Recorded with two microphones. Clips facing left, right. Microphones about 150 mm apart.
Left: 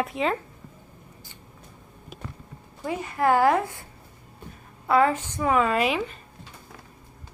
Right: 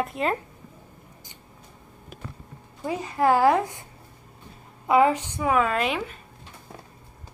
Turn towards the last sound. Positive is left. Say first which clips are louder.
# left 2 dB
turn(degrees=0)  # may be behind; listen again after turning